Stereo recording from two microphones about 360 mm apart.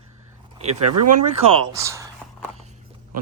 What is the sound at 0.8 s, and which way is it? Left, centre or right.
Speech, right.